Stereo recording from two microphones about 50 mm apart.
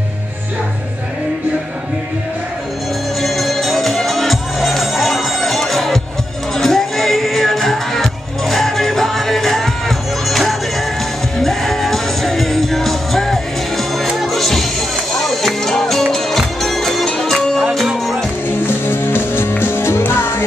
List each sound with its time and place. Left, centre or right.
3.2 s music: centre
18.6 s music: left